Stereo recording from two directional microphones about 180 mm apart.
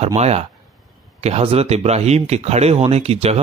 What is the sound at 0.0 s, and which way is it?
Speech, 35° right (ahead or behind).